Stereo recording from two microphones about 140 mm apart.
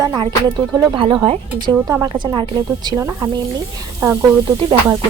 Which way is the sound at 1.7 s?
25° right (ahead or behind).